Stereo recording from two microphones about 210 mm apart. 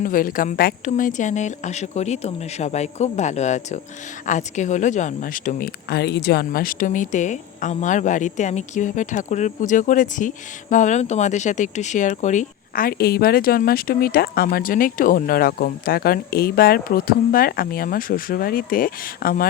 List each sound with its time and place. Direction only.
0.0 s speech: 40° left (ahead or behind)